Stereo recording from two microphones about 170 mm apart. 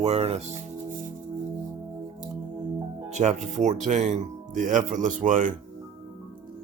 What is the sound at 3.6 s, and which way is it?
Speech, 45° right (ahead or behind).